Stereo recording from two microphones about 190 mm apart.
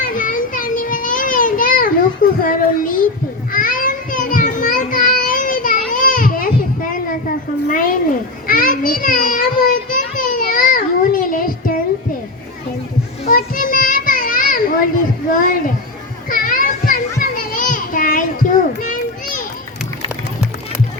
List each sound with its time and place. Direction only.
0.0 s a sound: 45° left (ahead or behind)
2.4 s speech: 45° left (ahead or behind)
3.5 s child singing: 45° left (ahead or behind)
7.7 s a sound: 45° left (ahead or behind)
13.2 s children playing: 45° left (ahead or behind)
15.3 s speech: 45° left (ahead or behind)
16.3 s children playing: 45° left (ahead or behind)